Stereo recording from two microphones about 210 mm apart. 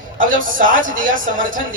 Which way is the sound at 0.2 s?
40° right (ahead or behind).